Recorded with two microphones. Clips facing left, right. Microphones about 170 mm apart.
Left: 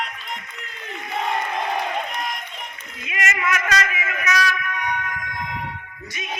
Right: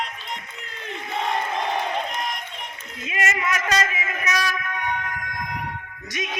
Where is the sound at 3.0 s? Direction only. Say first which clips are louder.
Even; 30° right (ahead or behind).